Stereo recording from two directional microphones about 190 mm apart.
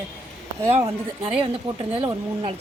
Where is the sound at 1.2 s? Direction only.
30° right (ahead or behind).